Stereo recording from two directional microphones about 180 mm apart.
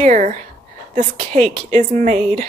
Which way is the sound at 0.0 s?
40° right (ahead or behind).